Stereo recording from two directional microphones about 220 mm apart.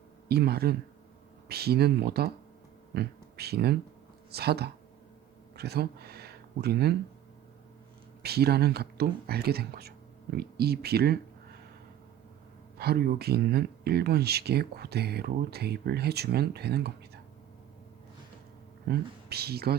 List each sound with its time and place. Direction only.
0.3 s speech: 45° right (ahead or behind)
8.2 s speech: 45° right (ahead or behind)
12.8 s speech: 45° right (ahead or behind)
18.9 s speech: 45° right (ahead or behind)